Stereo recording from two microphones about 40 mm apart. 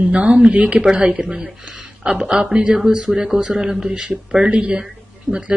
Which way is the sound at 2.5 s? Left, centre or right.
Right.